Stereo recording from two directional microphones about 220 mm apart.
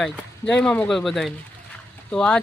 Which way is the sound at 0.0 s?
5° left (ahead or behind).